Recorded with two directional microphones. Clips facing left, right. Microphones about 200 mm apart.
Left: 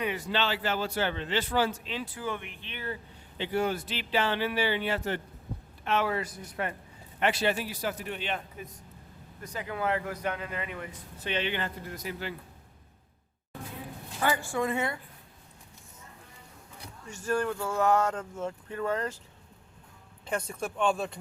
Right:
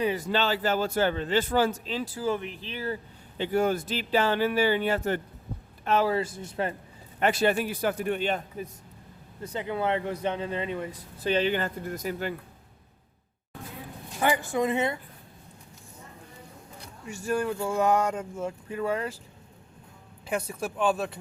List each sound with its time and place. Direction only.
0.0 s a man's voice: 40° right (ahead or behind)
7.2 s a man's voice: 45° right (ahead or behind)
9.4 s speech: 25° right (ahead or behind); by 12.3 s 45° right (ahead or behind)
14.2 s speech: 20° right (ahead or behind)
17.1 s speech: 10° right (ahead or behind)
20.2 s speech: 5° right (ahead or behind)